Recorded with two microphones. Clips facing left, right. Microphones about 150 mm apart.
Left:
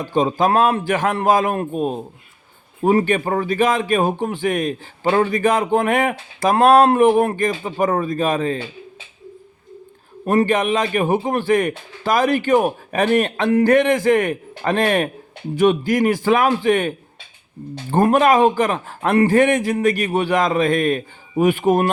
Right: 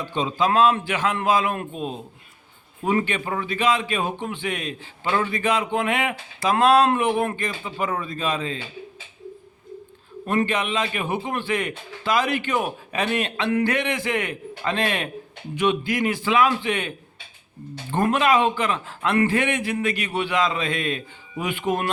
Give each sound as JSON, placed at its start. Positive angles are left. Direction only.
{"t": 0.0, "sound": "speech", "side_deg": 45}
{"t": 10.2, "sound": "speech", "side_deg": 45}
{"t": 17.9, "sound": "speech", "side_deg": 40}